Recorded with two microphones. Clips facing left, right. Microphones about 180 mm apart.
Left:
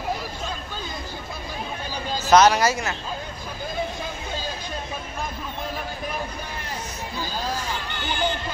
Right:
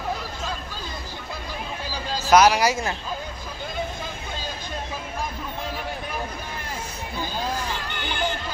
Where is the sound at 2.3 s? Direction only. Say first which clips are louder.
Even; 10° right (ahead or behind).